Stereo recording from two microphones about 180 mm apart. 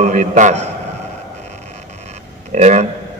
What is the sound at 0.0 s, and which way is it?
Speech, 45° right (ahead or behind).